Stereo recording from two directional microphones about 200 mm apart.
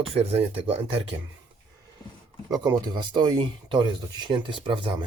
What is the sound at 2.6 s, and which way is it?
Speech, 20° right (ahead or behind).